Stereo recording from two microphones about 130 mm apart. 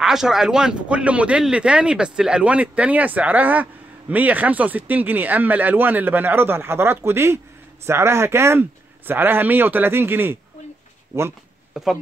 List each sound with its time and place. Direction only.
0.0 s speech: 5° right (ahead or behind)
11.7 s speech: 5° right (ahead or behind)